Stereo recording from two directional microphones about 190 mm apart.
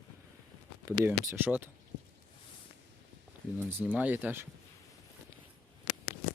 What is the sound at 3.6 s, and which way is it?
Speech, 10° right (ahead or behind).